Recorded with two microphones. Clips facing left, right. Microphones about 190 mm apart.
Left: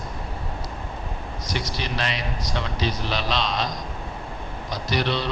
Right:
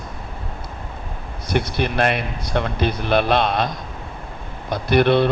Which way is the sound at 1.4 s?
55° right (ahead or behind).